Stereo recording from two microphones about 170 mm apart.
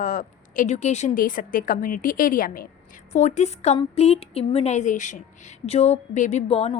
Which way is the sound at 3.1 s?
40° left (ahead or behind).